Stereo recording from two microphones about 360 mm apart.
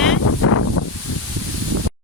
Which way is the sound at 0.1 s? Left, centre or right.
Left.